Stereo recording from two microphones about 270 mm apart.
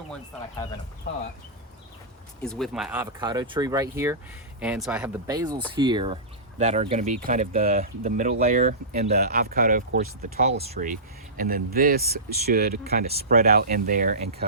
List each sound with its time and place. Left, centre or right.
2.4 s speech: centre; by 14.4 s right